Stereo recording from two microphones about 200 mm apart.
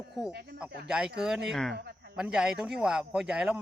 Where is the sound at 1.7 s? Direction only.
55° right (ahead or behind).